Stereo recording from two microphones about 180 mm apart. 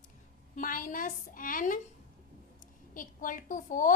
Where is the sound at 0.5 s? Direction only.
50° left (ahead or behind).